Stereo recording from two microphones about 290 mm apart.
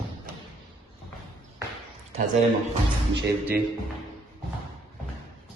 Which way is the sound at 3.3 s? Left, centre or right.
Centre.